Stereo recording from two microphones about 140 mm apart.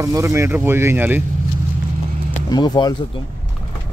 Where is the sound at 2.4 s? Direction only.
30° left (ahead or behind).